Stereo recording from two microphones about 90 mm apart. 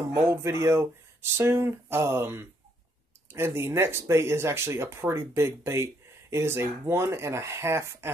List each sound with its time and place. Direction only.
0.2 s speech: 35° right (ahead or behind)